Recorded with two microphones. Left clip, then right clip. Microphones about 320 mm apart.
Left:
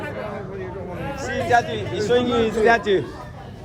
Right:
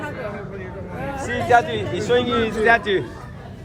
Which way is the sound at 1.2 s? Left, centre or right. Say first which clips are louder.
Right 2 dB; centre.